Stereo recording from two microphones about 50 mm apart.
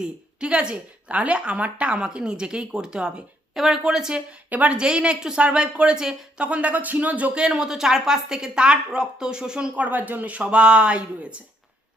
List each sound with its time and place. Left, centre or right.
0.0 s a woman's voice: right
3.5 s speech: centre
4.4 s speech: right
4.7 s a woman's voice: centre
6.4 s speech: right
7.3 s speech: centre
9.8 s speech: right
10.3 s a woman's voice: right